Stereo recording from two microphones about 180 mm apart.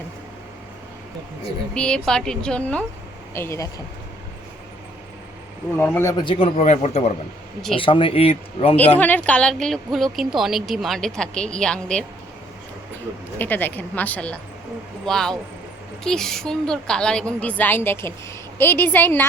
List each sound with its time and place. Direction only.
1.7 s a woman's voice: 5° left (ahead or behind)
5.7 s speech: 10° left (ahead or behind); by 8.7 s 35° left (ahead or behind)
9.0 s speech: 10° left (ahead or behind)
13.4 s a woman's voice: 10° left (ahead or behind)